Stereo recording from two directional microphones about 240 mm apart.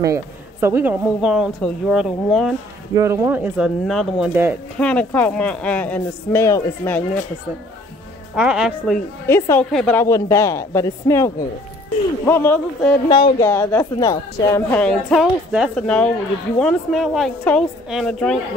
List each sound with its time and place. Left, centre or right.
0.0 s a woman's voice: centre
3.0 s speech: centre
4.7 s a woman's voice: centre
8.4 s a woman's voice: centre